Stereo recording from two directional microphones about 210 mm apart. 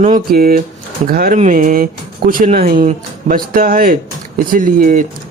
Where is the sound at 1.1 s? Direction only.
45° right (ahead or behind).